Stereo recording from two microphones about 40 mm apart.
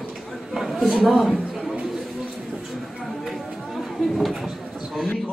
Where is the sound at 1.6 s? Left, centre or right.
Right.